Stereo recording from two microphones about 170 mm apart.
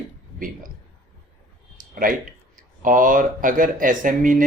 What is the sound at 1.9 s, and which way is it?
Speech, 55° right (ahead or behind).